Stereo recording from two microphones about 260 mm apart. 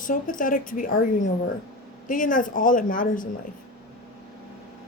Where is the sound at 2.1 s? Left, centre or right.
Left.